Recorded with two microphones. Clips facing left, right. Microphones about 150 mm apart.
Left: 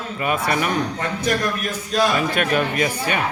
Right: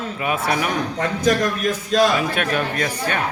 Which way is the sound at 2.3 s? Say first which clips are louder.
Left 2 dB; 5° left (ahead or behind).